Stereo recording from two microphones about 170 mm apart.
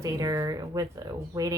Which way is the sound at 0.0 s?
20° right (ahead or behind).